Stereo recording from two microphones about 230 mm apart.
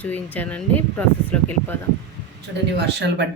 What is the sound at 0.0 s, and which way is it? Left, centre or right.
Speech, centre.